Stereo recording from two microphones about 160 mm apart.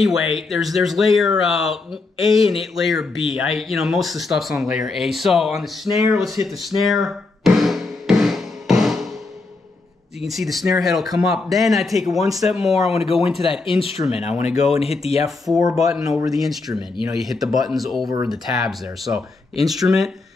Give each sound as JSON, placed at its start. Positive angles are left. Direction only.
{"t": 0.0, "sound": "speech", "side_deg": 0}
{"t": 6.4, "sound": "music", "side_deg": 0}
{"t": 10.2, "sound": "speech", "side_deg": 0}
{"t": 12.7, "sound": "speech", "side_deg": 40}
{"t": 14.5, "sound": "speech", "side_deg": -5}
{"t": 14.8, "sound": "speech", "side_deg": 40}
{"t": 15.2, "sound": "speech", "side_deg": 0}